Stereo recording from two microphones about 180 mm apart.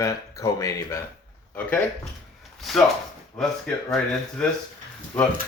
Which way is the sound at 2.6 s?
Centre (ahead or behind).